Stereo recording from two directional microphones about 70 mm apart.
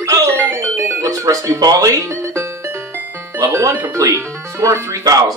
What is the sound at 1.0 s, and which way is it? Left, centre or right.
Speech, right.